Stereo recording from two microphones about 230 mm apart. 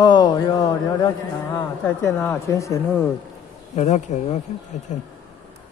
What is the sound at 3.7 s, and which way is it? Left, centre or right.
Speech, left.